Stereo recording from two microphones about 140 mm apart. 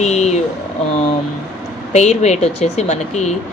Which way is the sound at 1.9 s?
55° left (ahead or behind).